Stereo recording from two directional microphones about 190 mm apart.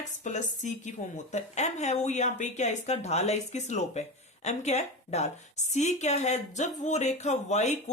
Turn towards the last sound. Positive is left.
turn(degrees=35)  # may be behind; listen again after turning